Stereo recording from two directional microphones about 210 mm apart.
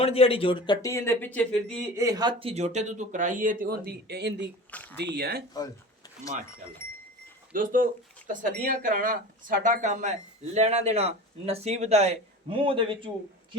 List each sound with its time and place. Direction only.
0.0 s speech: 25° left (ahead or behind); by 1.7 s 5° left (ahead or behind)
2.0 s speech: 15° right (ahead or behind); by 4.4 s 55° right (ahead or behind)
4.7 s speech: 10° left (ahead or behind)
4.9 s speech: 50° right (ahead or behind)
7.5 s speech: 40° right (ahead or behind); by 13.1 s 25° right (ahead or behind)